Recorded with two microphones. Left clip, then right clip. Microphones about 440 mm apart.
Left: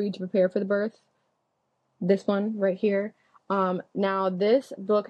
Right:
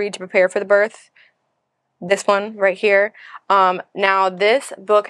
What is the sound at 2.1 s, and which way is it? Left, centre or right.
Speech, right.